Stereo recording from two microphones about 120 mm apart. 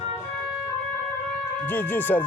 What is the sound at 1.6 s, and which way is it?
Speech, 15° left (ahead or behind).